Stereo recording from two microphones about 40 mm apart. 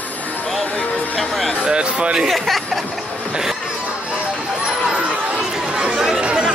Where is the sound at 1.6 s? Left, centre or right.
Right.